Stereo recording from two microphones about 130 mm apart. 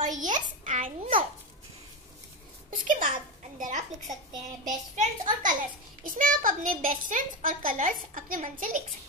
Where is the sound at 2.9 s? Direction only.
90° right.